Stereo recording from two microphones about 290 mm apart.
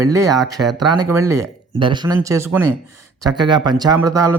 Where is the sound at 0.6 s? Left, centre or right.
Right.